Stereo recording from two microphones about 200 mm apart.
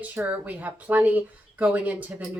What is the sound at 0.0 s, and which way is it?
Speech, 5° right (ahead or behind).